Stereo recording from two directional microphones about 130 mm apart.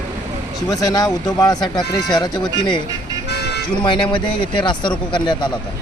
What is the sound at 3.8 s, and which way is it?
Speech, 35° left (ahead or behind).